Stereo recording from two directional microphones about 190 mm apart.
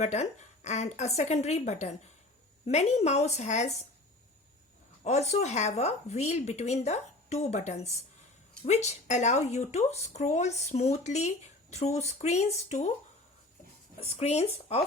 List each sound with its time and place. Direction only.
0.0 s speech: 35° left (ahead or behind)
5.0 s speech: 35° left (ahead or behind)
14.0 s speech: 35° left (ahead or behind)